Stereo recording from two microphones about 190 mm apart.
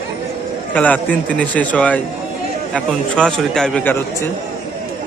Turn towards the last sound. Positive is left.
turn(degrees=5)  # may be behind; listen again after turning